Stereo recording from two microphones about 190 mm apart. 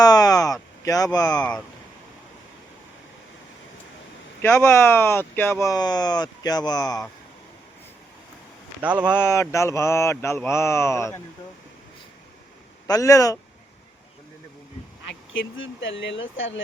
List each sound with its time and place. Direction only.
0.0 s speech: 20° left (ahead or behind)
1.4 s speech: 5° left (ahead or behind)
4.4 s mantra: 10° left (ahead or behind)
5.7 s speech: 20° left (ahead or behind)
8.8 s speech: 10° right (ahead or behind)
9.1 s mantra: 15° left (ahead or behind)
12.9 s mantra: 15° left (ahead or behind)
15.0 s speech: 90° left